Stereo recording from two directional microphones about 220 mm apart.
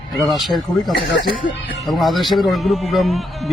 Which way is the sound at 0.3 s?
Centre (ahead or behind).